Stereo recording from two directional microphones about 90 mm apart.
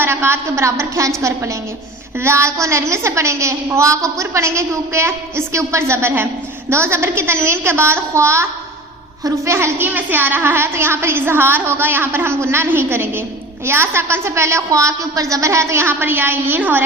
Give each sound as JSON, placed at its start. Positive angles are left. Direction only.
{"t": 0.0, "sound": "a woman's voice", "side_deg": -25}